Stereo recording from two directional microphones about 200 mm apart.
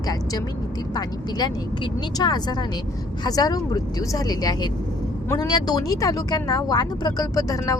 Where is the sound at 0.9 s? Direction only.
20° left (ahead or behind).